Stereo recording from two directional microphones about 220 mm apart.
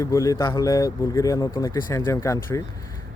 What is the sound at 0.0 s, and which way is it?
Speech, 15° left (ahead or behind).